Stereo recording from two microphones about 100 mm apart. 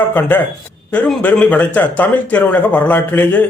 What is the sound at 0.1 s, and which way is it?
A man's voice, 20° left (ahead or behind).